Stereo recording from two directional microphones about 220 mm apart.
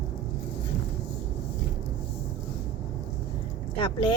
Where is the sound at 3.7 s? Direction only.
20° left (ahead or behind).